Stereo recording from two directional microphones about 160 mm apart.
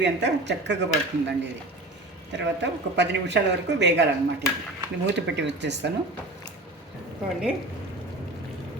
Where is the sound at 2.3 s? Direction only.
90° right.